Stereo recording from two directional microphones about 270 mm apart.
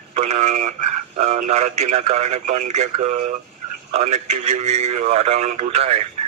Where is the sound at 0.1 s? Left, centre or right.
Right.